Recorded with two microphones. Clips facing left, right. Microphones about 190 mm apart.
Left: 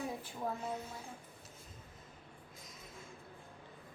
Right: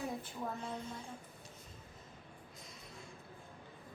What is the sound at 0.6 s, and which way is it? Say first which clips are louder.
Speech: left 1 dB; 5° left (ahead or behind).